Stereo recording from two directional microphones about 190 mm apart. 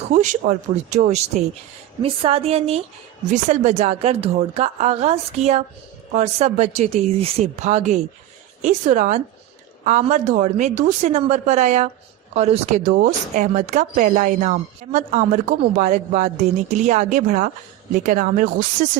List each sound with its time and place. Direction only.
0.1 s speech: 40° right (ahead or behind)